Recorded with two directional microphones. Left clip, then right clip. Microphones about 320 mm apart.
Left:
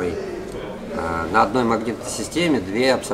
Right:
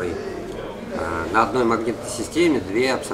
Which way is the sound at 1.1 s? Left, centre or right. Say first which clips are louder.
Left 1 dB; left.